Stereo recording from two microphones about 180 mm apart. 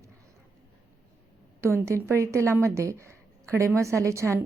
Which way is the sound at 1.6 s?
15° right (ahead or behind).